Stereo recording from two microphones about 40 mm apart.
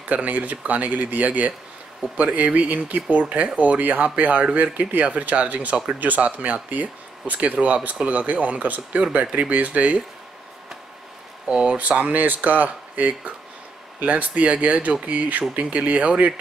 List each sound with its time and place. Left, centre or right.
0.0 s speech: right
11.4 s speech: right
12.0 s speech: right